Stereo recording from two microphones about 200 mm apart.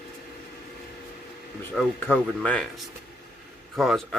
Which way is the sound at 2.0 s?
5° left (ahead or behind).